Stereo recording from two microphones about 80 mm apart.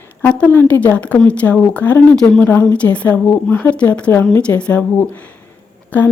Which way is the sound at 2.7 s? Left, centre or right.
Centre.